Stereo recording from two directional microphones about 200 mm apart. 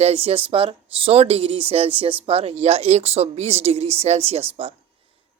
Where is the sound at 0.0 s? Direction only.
30° right (ahead or behind).